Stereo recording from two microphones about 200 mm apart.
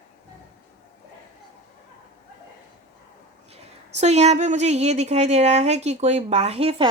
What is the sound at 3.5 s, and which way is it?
A woman's voice, 35° right (ahead or behind).